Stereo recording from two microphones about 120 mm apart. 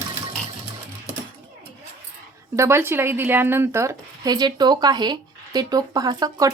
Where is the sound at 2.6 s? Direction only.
20° right (ahead or behind).